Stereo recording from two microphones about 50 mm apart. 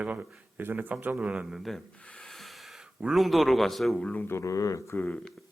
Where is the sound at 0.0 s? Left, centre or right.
Right.